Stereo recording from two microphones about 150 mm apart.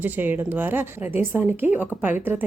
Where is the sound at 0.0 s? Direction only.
15° right (ahead or behind).